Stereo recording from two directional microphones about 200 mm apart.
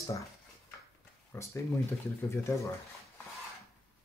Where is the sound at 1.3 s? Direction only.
15° left (ahead or behind).